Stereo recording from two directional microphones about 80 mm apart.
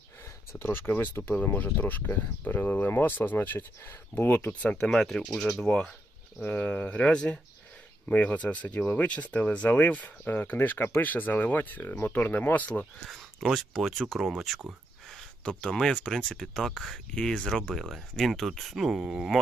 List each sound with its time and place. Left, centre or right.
0.2 s speech: left
13.1 s speech: centre